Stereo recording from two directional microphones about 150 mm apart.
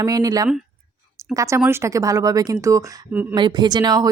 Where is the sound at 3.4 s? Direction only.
30° right (ahead or behind).